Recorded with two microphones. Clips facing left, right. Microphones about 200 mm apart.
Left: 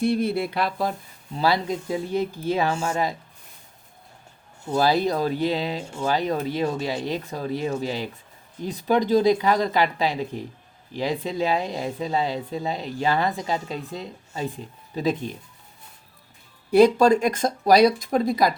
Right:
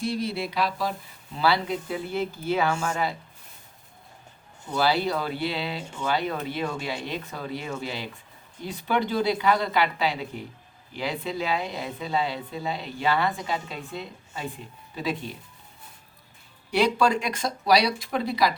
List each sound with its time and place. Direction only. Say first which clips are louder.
0.0 s a sound: left 6 dB; 55° left (ahead or behind)
2.1 s speech: left 1 dB; 35° left (ahead or behind)
4.7 s speech: left 3 dB; 40° left (ahead or behind)
16.7 s speech: left 7 dB; 45° left (ahead or behind)